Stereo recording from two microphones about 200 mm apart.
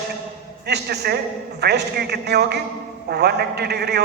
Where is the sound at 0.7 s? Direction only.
55° right (ahead or behind).